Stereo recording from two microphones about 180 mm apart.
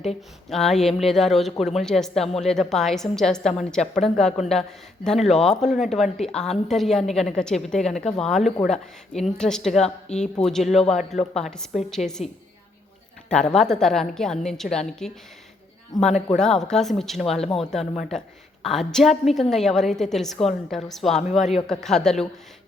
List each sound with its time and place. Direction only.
0.5 s a woman's voice: centre (ahead or behind)
13.3 s a woman's voice: 5° left (ahead or behind)
16.0 s a man's voice: 40° left (ahead or behind)
16.4 s a woman's voice: 5° left (ahead or behind)